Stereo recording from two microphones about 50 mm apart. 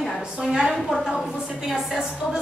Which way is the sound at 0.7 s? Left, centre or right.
Centre.